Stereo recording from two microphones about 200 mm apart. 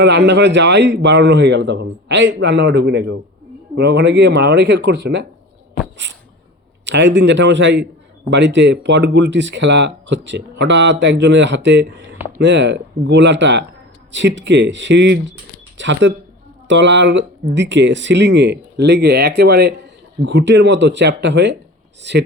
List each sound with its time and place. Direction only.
0.0 s speech: 60° right (ahead or behind)
6.0 s a sound: 65° right (ahead or behind)
6.8 s speech: 65° right (ahead or behind)